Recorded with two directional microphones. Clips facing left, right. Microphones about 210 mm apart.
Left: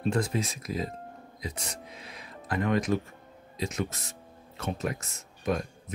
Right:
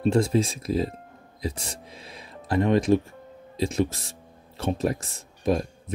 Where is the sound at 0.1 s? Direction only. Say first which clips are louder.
Right 6 dB; 30° right (ahead or behind).